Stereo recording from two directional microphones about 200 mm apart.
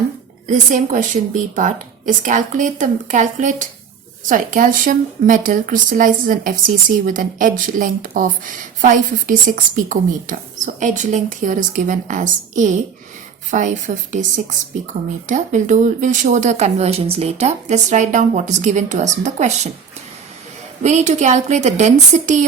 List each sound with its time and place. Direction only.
0.4 s speech: 40° right (ahead or behind)
20.8 s speech: 35° right (ahead or behind)